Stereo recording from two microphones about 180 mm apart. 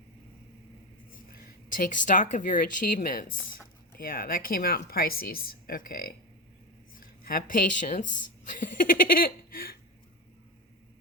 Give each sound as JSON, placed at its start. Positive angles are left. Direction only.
{"t": 1.7, "sound": "a woman's voice", "side_deg": 45}
{"t": 8.4, "sound": "laughter", "side_deg": 45}